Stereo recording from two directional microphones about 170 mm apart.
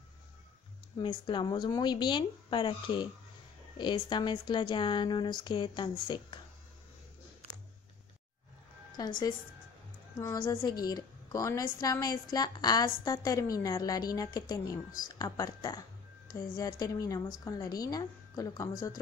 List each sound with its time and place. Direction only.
0.9 s a woman's voice: 25° left (ahead or behind)
9.0 s a woman's voice: 20° left (ahead or behind)
10.2 s a woman's voice: 20° left (ahead or behind)